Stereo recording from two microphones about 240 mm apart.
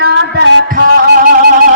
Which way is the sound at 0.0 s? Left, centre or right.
Right.